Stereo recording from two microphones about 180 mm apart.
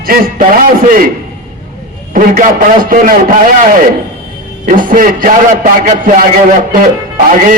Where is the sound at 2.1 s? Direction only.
50° right (ahead or behind).